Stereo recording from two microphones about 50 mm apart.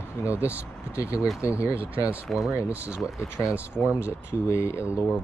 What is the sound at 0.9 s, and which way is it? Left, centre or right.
Speech, left.